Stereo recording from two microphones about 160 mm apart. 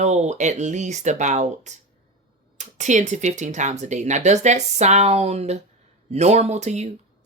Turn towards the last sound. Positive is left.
turn(degrees=-45)  # may be behind; listen again after turning